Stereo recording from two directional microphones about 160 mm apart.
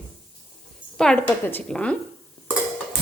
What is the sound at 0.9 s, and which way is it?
A woman's voice, 5° left (ahead or behind).